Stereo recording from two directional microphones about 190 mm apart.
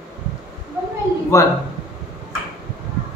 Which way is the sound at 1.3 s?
15° left (ahead or behind).